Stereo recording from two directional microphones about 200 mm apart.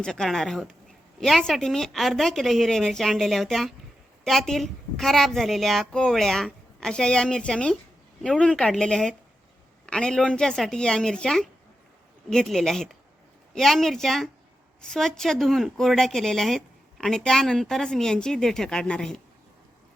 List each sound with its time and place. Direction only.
0.0 s speech: 5° left (ahead or behind)